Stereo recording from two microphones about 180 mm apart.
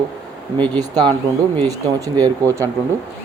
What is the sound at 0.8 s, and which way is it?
Speech, 20° right (ahead or behind).